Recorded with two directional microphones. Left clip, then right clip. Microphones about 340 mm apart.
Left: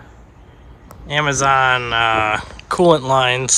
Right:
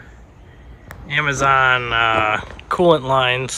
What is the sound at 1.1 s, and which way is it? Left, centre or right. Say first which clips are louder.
Speech: left 1 dB; centre.